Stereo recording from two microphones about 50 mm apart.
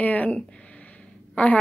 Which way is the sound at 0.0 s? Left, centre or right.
Left.